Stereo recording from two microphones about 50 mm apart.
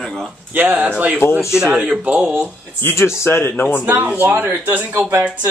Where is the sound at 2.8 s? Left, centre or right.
Left.